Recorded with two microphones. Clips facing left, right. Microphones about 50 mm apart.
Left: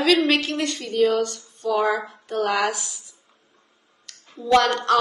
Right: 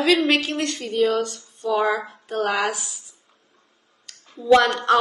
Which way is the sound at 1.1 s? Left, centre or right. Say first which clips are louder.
Left 1 dB; centre.